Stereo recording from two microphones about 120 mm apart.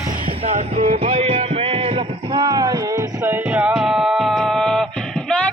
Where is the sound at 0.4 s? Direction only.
60° right (ahead or behind).